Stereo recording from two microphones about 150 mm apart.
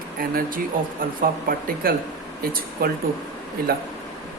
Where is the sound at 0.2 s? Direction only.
75° right (ahead or behind).